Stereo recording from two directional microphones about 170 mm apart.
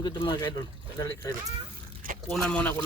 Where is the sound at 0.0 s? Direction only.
25° left (ahead or behind).